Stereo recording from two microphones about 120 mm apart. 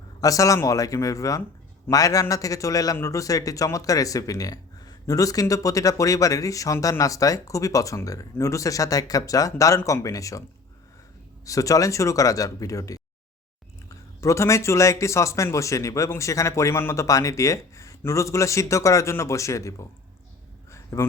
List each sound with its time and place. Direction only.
0.2 s a man's voice: 30° left (ahead or behind)
11.4 s a man's voice: 30° left (ahead or behind)
14.2 s a man's voice: 25° left (ahead or behind)
20.7 s a sound: 25° left (ahead or behind)